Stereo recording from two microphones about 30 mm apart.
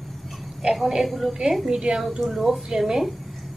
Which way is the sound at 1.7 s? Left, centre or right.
Right.